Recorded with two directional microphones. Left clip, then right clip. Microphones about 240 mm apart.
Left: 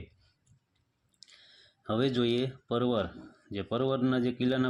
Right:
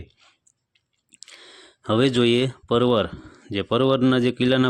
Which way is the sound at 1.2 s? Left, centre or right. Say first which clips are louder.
Right 11 dB; right.